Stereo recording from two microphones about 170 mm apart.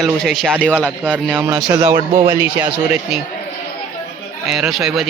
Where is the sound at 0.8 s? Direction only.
10° right (ahead or behind).